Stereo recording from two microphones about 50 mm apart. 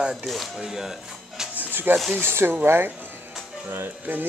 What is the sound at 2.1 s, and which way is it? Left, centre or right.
Speech, right.